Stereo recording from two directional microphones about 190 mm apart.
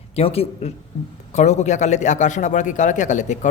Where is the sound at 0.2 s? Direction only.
30° left (ahead or behind).